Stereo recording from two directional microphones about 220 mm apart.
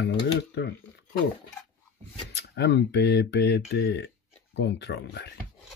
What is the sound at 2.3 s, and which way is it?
Speech, 50° left (ahead or behind).